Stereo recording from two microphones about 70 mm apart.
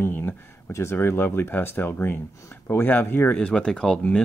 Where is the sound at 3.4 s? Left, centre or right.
Centre.